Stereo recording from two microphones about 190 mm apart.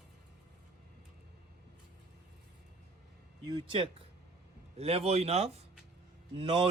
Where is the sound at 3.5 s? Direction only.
25° right (ahead or behind).